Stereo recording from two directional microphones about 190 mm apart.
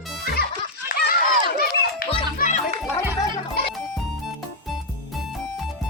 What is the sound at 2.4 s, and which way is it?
Children playing, 40° left (ahead or behind).